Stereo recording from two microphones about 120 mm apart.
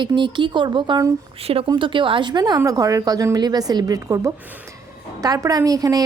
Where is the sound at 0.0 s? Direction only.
40° right (ahead or behind).